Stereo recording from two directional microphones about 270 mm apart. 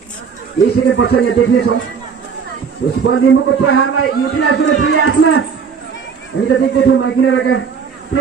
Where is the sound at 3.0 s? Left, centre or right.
Left.